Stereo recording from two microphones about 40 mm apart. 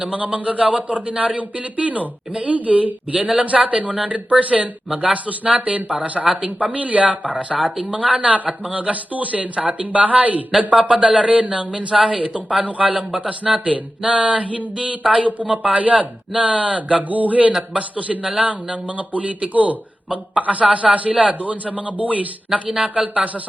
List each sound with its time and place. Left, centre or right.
0.0 s speech: right
1.1 s speech: right
1.4 s speech: right
10.8 s speech: right
12.8 s speech: centre
13.1 s speech: right
14.0 s speech: centre
14.3 s speech: right
15.3 s speech: right
17.0 s speech: right
22.7 s speech: right
23.1 s speech: right